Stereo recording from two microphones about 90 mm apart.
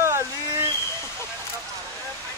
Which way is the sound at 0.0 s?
30° right (ahead or behind).